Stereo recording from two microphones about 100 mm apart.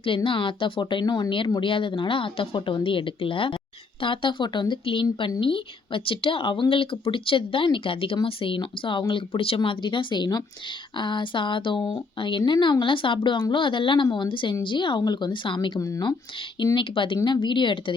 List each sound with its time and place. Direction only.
0.0 s speech: 60° left (ahead or behind); by 1.3 s 45° left (ahead or behind)
1.6 s speech: 60° left (ahead or behind)
9.6 s speech: 55° left (ahead or behind)